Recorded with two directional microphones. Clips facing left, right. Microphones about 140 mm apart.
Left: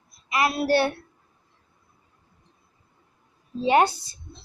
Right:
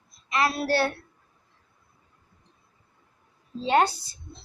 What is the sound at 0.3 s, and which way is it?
Speech, 15° left (ahead or behind).